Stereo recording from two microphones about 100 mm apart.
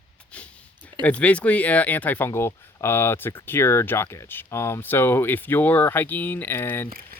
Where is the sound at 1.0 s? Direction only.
15° left (ahead or behind).